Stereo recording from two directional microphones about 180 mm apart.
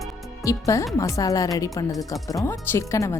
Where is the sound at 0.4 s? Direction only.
15° left (ahead or behind).